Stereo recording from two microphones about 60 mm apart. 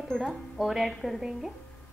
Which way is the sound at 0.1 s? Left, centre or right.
Centre.